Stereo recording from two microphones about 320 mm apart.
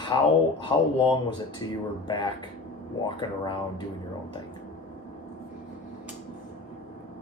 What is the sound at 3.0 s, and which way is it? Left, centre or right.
Speech, centre.